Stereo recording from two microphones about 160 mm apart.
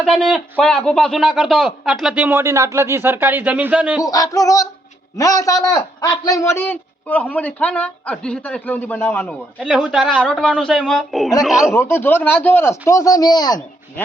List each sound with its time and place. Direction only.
0.0 s a man's voice: centre (ahead or behind)
4.0 s music: 20° left (ahead or behind)
5.1 s a man's voice: 20° left (ahead or behind)
9.6 s a man's voice: 5° right (ahead or behind)
11.7 s a man's voice: 15° left (ahead or behind)